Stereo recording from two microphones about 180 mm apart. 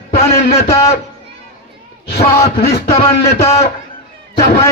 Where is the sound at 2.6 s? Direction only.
60° left (ahead or behind).